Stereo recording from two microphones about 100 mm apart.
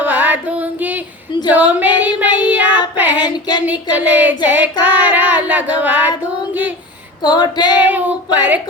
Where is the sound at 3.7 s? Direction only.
20° right (ahead or behind).